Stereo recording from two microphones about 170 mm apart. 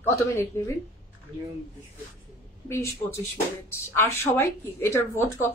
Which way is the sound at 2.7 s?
15° left (ahead or behind).